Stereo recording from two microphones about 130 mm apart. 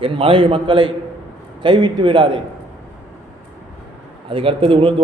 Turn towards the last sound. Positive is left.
turn(degrees=-45)  # may be behind; listen again after turning